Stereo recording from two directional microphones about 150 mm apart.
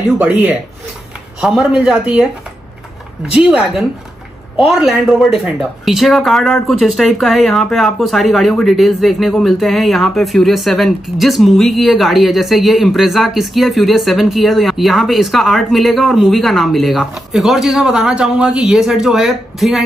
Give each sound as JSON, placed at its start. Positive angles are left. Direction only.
{"t": 0.2, "sound": "speech", "side_deg": -10}
{"t": 3.3, "sound": "speech", "side_deg": -5}